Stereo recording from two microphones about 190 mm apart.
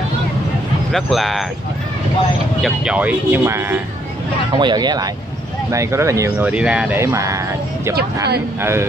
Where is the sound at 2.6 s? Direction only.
5° right (ahead or behind).